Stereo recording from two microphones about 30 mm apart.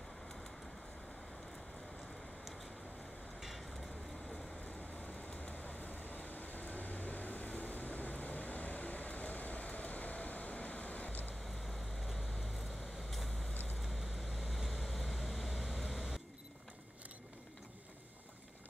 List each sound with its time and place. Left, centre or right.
3.3 s a sound: centre
5.0 s vehicle: left
11.4 s vehicle: centre
13.5 s vehicle: left
13.7 s vehicle: centre
15.9 s camera: centre